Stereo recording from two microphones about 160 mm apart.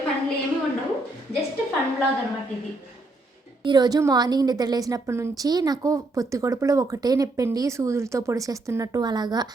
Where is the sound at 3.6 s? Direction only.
25° right (ahead or behind).